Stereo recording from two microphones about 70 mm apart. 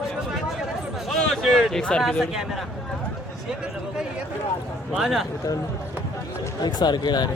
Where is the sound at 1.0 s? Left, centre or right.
Centre.